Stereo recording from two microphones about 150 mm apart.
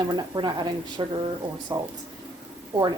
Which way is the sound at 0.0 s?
30° right (ahead or behind).